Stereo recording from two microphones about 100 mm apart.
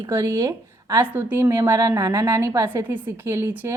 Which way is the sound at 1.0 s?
20° right (ahead or behind).